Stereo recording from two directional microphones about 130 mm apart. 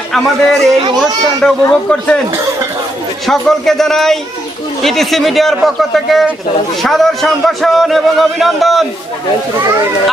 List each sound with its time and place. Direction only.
0.1 s a man's voice: centre (ahead or behind)
3.2 s a man's voice: 5° left (ahead or behind)